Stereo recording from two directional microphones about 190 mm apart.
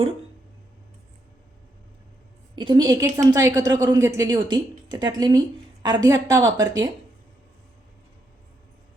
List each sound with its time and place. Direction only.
2.6 s a woman's voice: 25° right (ahead or behind)